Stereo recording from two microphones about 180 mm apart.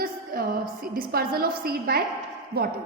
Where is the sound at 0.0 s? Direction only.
55° right (ahead or behind).